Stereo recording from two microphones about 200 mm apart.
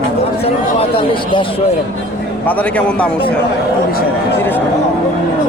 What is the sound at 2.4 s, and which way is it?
Speech, 5° left (ahead or behind).